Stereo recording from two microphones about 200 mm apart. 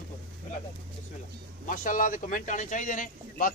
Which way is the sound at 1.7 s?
40° left (ahead or behind).